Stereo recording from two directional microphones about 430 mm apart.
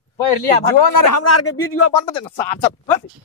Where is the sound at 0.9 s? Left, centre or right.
Left.